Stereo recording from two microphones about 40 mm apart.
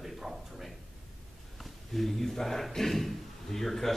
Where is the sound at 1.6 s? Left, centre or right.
Centre.